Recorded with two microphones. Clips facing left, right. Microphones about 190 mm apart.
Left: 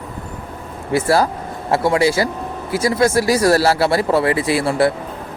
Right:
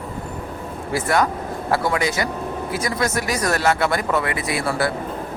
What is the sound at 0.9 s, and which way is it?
Speech, 30° left (ahead or behind).